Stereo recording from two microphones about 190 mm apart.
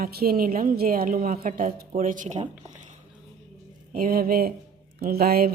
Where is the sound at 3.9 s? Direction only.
50° right (ahead or behind).